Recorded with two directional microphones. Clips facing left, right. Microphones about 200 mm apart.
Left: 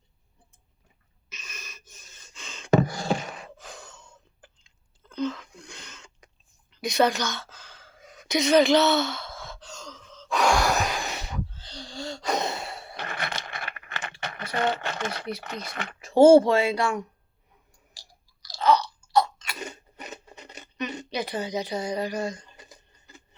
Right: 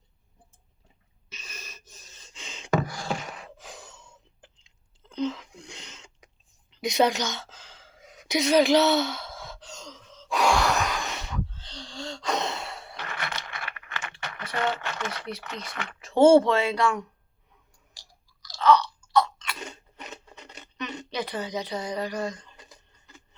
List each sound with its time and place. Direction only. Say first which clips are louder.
1.3 s gasp: even; 30° right (ahead or behind)
2.3 s a sound: even; 15° right (ahead or behind)
2.6 s beatboxing: left 5 dB; 25° left (ahead or behind)
3.4 s a sound: left 1 dB; 15° right (ahead or behind)
8.3 s speech: left 1 dB; 5° right (ahead or behind)
8.8 s sigh: even; 15° right (ahead or behind)
10.8 s a sound: left 1 dB; 35° left (ahead or behind)
11.2 s a sound: even; 10° left (ahead or behind)
12.5 s computer keyboard: left 1 dB; 40° left (ahead or behind)
16.1 s speech: left 2 dB; 35° left (ahead or behind)
16.5 s speech: left 1 dB; 10° left (ahead or behind)
18.8 s chewing: even; 40° left (ahead or behind)
19.5 s scissors: left 2 dB; 5° left (ahead or behind)